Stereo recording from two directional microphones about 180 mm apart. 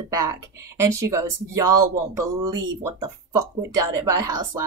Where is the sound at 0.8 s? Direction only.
15° right (ahead or behind).